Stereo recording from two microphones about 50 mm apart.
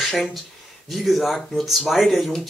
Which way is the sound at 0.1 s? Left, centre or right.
Centre.